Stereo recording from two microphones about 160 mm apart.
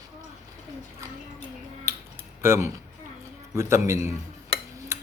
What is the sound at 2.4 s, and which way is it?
Speech, 15° right (ahead or behind).